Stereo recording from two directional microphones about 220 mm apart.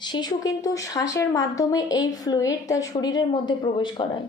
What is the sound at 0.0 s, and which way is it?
A woman's voice, 20° left (ahead or behind).